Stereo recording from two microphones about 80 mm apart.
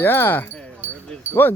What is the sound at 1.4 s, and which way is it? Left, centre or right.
Speech, left.